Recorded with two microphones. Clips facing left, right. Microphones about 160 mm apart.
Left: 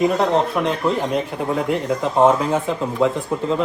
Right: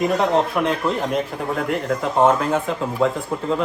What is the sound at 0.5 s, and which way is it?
Speech, centre (ahead or behind).